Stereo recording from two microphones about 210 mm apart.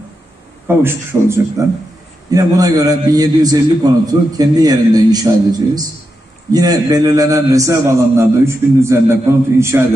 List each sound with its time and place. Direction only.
0.7 s a man's voice: 10° right (ahead or behind)